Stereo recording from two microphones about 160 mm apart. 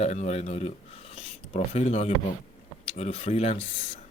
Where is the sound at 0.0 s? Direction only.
45° left (ahead or behind).